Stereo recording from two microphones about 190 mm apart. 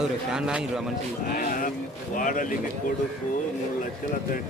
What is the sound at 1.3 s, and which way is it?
A man's voice, 45° left (ahead or behind).